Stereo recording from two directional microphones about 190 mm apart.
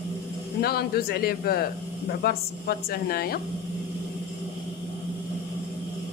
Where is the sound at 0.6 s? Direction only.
55° left (ahead or behind).